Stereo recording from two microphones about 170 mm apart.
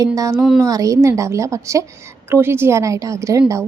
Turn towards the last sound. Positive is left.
turn(degrees=-20)  # may be behind; listen again after turning